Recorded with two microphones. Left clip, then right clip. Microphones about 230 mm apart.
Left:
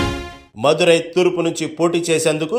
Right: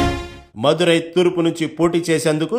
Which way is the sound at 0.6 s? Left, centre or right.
Right.